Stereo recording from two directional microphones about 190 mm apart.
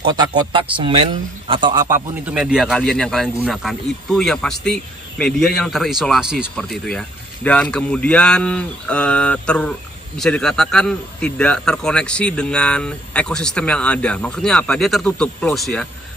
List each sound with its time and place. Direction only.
0.0 s a man's voice: 20° right (ahead or behind)
2.2 s speech: 5° right (ahead or behind)